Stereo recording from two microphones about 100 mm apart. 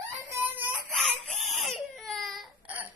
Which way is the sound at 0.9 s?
5° left (ahead or behind).